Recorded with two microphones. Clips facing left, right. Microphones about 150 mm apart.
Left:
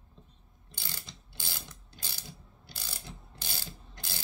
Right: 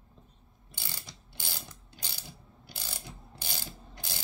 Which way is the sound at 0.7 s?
15° right (ahead or behind).